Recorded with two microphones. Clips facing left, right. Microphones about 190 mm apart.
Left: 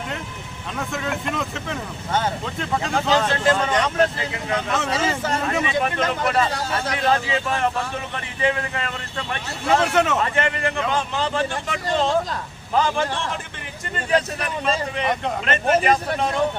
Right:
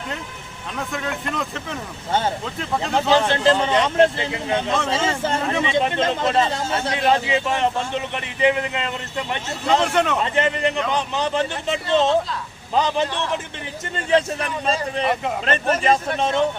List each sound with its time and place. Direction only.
0.8 s speech: centre (ahead or behind)
3.2 s speech: 30° right (ahead or behind)
9.8 s speech: centre (ahead or behind)
10.2 s speech: 20° right (ahead or behind)
15.0 s speech: 5° right (ahead or behind)
15.4 s speech: 30° right (ahead or behind)